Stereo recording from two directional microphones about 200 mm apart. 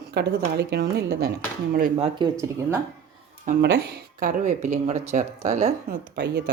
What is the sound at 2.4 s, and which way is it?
Speech, 15° right (ahead or behind).